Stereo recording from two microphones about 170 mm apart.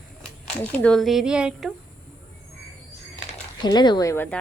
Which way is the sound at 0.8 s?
5° left (ahead or behind).